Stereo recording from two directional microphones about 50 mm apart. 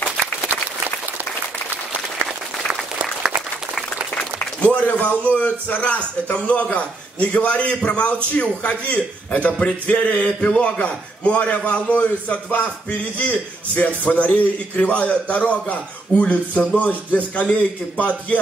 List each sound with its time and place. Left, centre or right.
2.7 s applause: centre
4.6 s a man's voice: left